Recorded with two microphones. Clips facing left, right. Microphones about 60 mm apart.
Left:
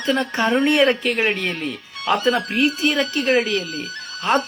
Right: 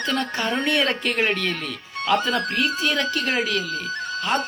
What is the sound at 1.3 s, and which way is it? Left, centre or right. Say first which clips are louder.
Speech: left 2 dB; left.